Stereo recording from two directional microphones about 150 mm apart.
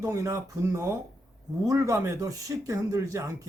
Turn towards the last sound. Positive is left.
turn(degrees=-20)  # may be behind; listen again after turning